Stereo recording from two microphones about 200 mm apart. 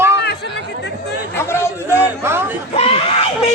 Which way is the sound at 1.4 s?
10° left (ahead or behind).